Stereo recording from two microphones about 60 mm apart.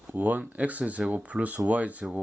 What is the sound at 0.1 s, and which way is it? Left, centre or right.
Speech, right.